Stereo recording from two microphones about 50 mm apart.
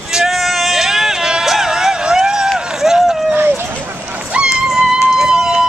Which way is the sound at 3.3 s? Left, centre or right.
Right.